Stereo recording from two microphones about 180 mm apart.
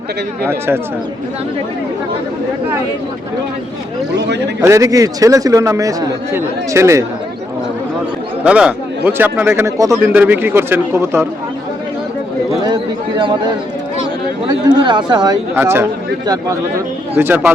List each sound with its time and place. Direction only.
4.2 s speech: 70° right (ahead or behind)
4.6 s a man's voice: 15° right (ahead or behind)
8.4 s a man's voice: 5° right (ahead or behind)
12.6 s a man's voice: 25° right (ahead or behind)